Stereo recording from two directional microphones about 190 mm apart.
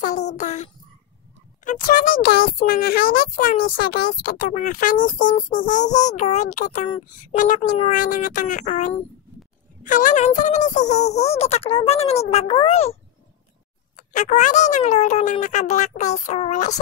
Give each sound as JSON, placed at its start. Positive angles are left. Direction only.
{"t": 0.0, "sound": "a child's voice", "side_deg": 40}
{"t": 13.9, "sound": "speech", "side_deg": 40}